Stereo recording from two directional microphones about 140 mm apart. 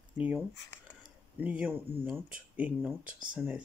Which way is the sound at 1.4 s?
10° right (ahead or behind).